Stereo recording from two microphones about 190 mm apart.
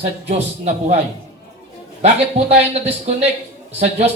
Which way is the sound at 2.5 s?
35° right (ahead or behind).